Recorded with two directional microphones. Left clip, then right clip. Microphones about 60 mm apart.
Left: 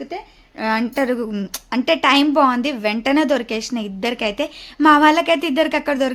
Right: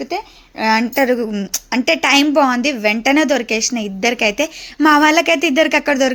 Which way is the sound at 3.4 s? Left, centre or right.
Centre.